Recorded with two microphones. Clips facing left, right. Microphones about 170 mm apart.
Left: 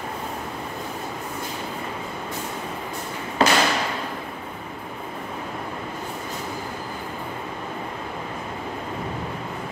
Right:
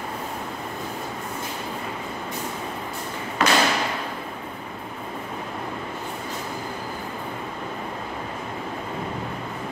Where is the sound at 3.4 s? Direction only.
30° left (ahead or behind).